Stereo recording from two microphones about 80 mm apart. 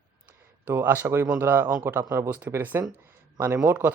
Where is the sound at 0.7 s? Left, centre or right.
Right.